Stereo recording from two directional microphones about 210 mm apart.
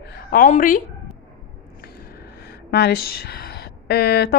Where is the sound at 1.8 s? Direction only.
45° left (ahead or behind).